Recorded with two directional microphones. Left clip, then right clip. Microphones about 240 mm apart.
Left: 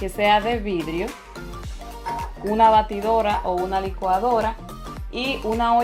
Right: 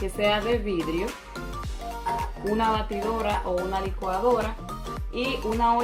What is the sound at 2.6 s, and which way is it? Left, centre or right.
Speech, left.